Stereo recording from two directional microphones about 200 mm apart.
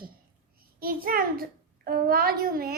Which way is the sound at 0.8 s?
45° right (ahead or behind).